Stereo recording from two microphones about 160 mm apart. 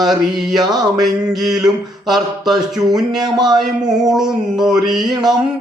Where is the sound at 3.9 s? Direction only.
Centre (ahead or behind).